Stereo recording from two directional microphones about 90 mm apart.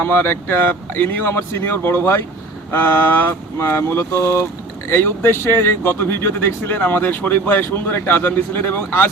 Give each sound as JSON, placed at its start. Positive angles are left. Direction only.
{"t": 0.0, "sound": "speech", "side_deg": 25}